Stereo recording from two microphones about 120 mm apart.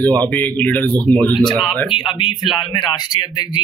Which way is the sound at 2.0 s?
45° left (ahead or behind).